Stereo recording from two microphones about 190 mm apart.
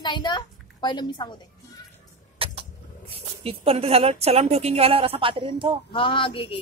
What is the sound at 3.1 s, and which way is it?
A woman's voice, 30° right (ahead or behind).